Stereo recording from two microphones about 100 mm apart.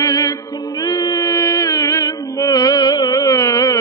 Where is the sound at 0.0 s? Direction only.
35° left (ahead or behind).